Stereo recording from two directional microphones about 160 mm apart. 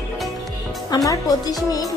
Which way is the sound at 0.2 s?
Centre (ahead or behind).